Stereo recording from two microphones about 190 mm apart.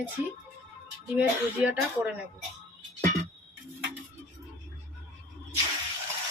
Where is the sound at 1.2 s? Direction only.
5° right (ahead or behind).